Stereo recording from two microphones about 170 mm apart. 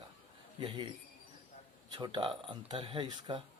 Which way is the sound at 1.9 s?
25° right (ahead or behind).